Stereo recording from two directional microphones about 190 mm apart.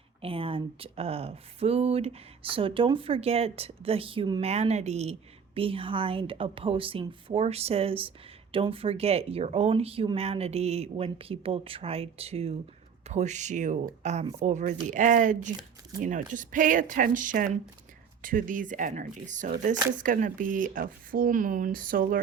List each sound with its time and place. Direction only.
0.2 s a woman's voice: 30° right (ahead or behind); by 22.2 s 45° right (ahead or behind)